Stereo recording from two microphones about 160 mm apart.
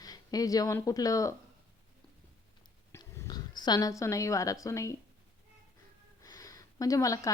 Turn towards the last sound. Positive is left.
turn(degrees=20)  # may be behind; listen again after turning